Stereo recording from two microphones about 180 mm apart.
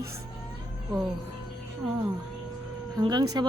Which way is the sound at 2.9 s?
20° right (ahead or behind).